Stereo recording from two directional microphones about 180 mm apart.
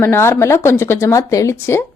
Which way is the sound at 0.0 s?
15° left (ahead or behind).